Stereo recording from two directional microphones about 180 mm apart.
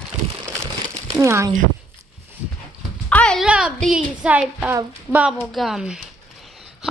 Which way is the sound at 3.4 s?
5° right (ahead or behind).